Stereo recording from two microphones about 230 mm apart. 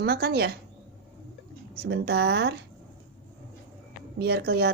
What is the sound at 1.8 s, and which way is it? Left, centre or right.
Speech, right.